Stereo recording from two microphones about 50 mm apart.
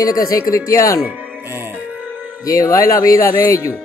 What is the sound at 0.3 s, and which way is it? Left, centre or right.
Speech, left.